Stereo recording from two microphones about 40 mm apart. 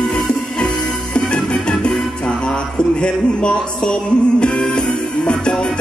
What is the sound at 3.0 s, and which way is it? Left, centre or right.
Music, left.